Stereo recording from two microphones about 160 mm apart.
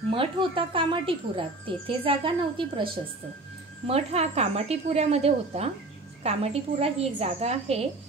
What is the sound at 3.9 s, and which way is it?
Speech, 40° right (ahead or behind).